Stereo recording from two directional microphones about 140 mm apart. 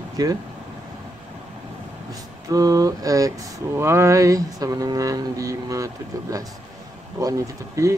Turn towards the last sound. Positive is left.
turn(degrees=-20)  # may be behind; listen again after turning